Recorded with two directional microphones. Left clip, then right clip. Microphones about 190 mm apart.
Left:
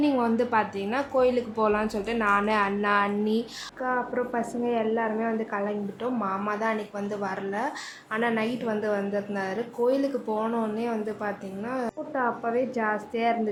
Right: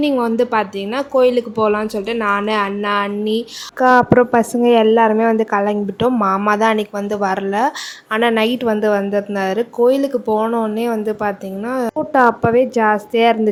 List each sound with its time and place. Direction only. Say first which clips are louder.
0.0 s speech: right 8 dB; 30° right (ahead or behind)
3.8 s a woman's voice: right 17 dB; 55° right (ahead or behind)